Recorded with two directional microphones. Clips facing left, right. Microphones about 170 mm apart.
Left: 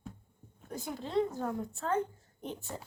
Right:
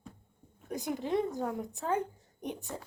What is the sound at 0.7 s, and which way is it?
A woman's voice, 15° right (ahead or behind).